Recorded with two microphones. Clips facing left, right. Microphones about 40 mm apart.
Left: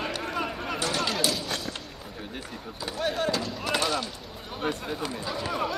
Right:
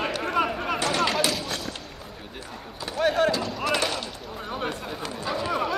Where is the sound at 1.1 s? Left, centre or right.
Right.